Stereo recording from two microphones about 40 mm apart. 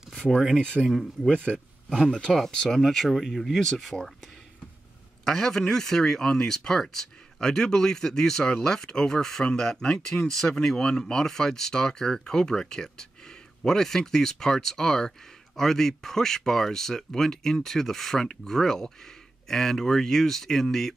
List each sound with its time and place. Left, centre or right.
0.1 s a sound: centre
0.8 s speech: centre
1.3 s a man's voice: left
2.3 s speech: centre
3.5 s speech: centre
5.2 s speech: centre